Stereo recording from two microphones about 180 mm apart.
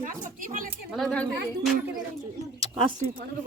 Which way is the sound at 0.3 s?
50° right (ahead or behind).